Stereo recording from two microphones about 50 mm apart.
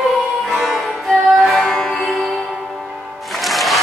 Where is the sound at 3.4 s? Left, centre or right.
Centre.